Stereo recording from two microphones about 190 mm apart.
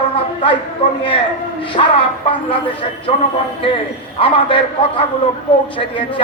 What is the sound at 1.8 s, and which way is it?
Speech, 30° left (ahead or behind).